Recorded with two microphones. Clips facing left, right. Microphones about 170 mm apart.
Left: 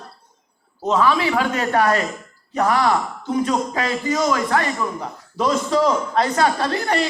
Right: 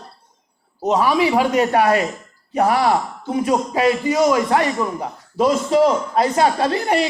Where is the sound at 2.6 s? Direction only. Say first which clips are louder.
Right 2 dB; 30° right (ahead or behind).